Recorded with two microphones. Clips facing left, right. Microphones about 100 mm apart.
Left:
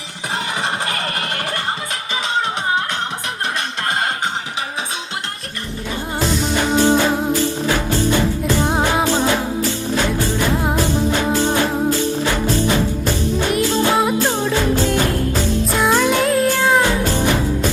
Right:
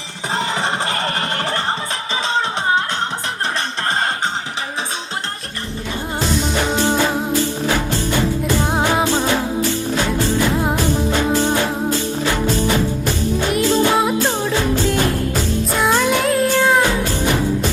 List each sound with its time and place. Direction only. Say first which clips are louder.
2.2 s music: right 1 dB; 30° right (ahead or behind)
8.6 s music: even; centre (ahead or behind)
13.5 s music: right 2 dB; centre (ahead or behind)
15.8 s music: left 1 dB; centre (ahead or behind)